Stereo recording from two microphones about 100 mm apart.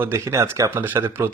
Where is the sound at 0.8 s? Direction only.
20° right (ahead or behind).